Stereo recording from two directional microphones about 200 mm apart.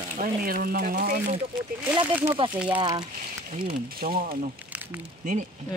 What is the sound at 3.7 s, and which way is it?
Speech, 45° right (ahead or behind).